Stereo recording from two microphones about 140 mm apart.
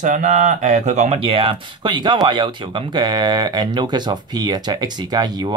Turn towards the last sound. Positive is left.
turn(degrees=-30)  # may be behind; listen again after turning